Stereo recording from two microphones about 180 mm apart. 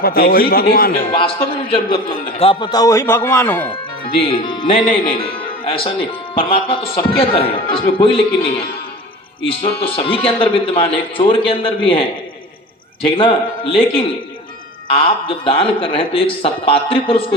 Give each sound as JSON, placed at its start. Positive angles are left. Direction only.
{"t": 0.0, "sound": "a man's voice", "side_deg": 55}
{"t": 0.9, "sound": "a man's voice", "side_deg": 30}
{"t": 3.7, "sound": "a man's voice", "side_deg": 30}
{"t": 13.1, "sound": "speech", "side_deg": 30}